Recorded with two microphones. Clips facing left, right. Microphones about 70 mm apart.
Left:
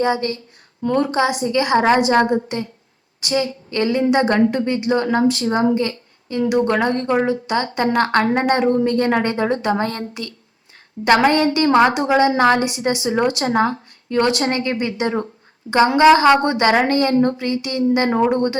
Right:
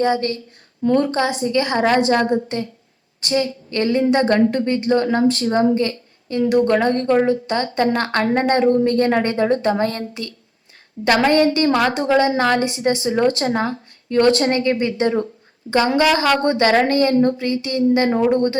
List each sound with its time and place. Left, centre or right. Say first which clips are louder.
0.0 s a woman's voice: right 1 dB; left
5.6 s a woman's voice: even; left
13.4 s a woman's voice: left 3 dB; left
14.2 s a woman's voice: right 3 dB; left
16.0 s a woman's voice: left 8 dB; left